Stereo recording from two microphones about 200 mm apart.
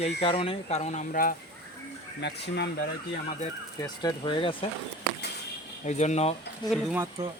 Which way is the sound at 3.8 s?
20° left (ahead or behind).